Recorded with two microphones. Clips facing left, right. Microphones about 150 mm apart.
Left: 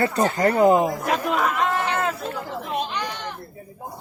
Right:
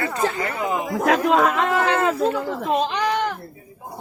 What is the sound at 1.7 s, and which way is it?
Speech, 90° right.